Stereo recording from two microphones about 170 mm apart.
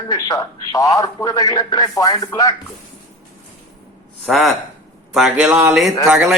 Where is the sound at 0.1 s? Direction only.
20° left (ahead or behind).